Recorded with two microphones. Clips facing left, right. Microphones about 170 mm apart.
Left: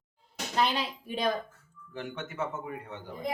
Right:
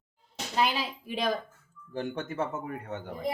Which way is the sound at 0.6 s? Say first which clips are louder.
Even; 5° right (ahead or behind).